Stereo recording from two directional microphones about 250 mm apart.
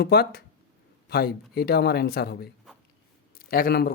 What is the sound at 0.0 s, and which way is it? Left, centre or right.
A man's voice, left.